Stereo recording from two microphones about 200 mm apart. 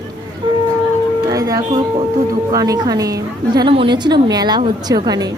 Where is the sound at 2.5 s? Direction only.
15° right (ahead or behind).